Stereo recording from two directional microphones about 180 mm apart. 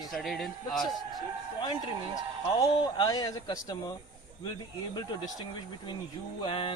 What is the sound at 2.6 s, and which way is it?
Speech, 20° left (ahead or behind).